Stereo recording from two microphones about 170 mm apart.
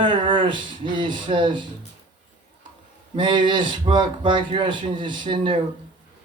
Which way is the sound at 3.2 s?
25° right (ahead or behind).